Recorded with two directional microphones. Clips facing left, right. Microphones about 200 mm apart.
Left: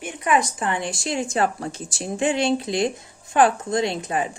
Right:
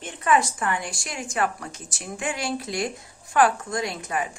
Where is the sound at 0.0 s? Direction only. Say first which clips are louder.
Left 1 dB; 15° left (ahead or behind).